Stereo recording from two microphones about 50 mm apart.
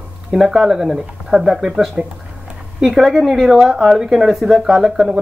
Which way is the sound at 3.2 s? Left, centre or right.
Centre.